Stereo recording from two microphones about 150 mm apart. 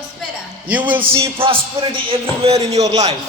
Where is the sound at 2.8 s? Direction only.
25° right (ahead or behind).